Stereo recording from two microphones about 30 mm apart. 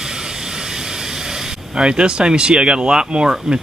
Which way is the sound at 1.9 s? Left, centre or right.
Right.